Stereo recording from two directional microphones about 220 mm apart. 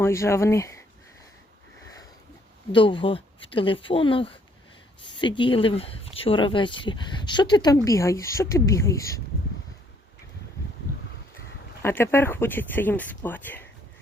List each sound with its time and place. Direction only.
0.0 s speech: 10° left (ahead or behind)
2.7 s speech: 20° left (ahead or behind)
10.9 s a sound: 40° left (ahead or behind)
11.8 s speech: 10° left (ahead or behind)